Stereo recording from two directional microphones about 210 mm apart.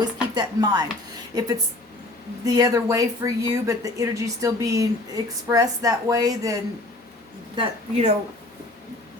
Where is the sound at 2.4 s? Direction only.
15° right (ahead or behind).